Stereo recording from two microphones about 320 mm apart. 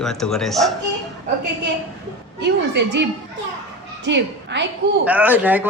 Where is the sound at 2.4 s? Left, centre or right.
Right.